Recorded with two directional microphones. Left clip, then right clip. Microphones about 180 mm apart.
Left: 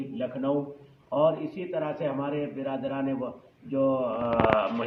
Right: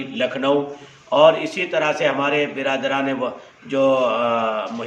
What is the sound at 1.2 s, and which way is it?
A man's voice, 15° right (ahead or behind).